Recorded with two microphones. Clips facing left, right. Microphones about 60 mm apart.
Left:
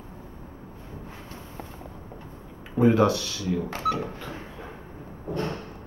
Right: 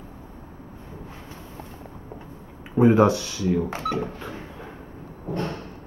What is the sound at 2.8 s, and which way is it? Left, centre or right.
Speech, right.